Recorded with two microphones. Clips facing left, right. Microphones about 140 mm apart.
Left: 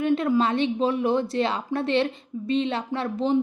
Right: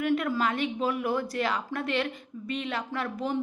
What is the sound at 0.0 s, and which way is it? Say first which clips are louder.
Speech: left 5 dB; 20° left (ahead or behind).